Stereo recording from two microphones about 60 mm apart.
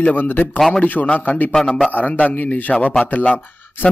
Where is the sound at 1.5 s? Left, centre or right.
Centre.